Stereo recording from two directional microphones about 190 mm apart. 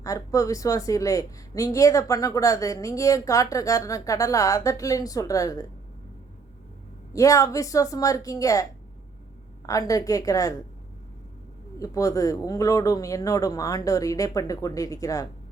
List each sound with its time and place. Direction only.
0.0 s a woman's voice: 15° left (ahead or behind)
7.1 s a woman's voice: 15° left (ahead or behind)
9.6 s a woman's voice: 20° left (ahead or behind)
11.8 s a woman's voice: 15° left (ahead or behind)